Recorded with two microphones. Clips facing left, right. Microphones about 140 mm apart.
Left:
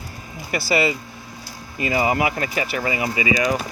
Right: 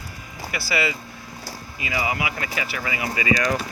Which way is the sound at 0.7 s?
25° left (ahead or behind).